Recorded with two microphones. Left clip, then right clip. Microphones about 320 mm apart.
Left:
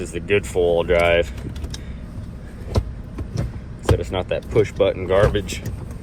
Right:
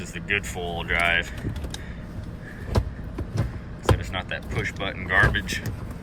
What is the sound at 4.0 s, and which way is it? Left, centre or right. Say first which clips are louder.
Speech: left 7 dB; centre.